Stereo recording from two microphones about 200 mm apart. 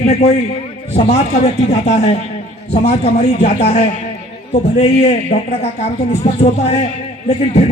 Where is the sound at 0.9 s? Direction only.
35° left (ahead or behind).